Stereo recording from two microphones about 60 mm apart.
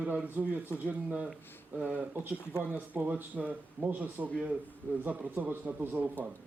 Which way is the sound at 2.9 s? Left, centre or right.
Right.